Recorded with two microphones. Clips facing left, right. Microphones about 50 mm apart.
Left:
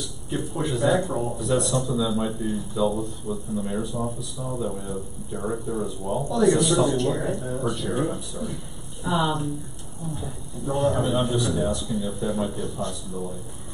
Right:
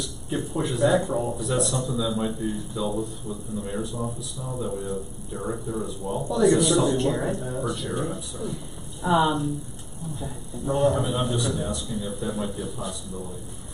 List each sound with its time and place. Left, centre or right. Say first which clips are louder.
0.0 s speech: even; centre
9.0 s speech: right 3 dB; centre